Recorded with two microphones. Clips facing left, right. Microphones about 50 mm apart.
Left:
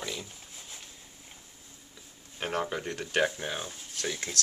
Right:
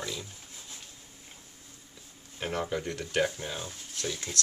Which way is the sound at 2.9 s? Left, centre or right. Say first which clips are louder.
Left 3 dB; left.